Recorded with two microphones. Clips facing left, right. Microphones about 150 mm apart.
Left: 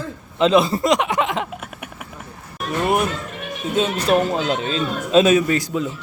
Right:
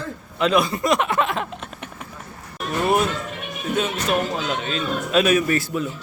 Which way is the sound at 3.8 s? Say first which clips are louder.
Left 5 dB; 35° left (ahead or behind).